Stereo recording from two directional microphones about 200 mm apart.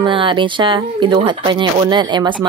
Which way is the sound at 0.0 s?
25° right (ahead or behind).